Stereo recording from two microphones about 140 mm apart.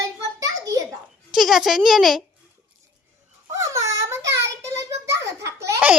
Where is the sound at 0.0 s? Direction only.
25° right (ahead or behind).